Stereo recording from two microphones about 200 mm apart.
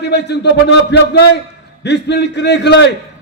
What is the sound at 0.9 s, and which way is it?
A man's voice, 60° left (ahead or behind).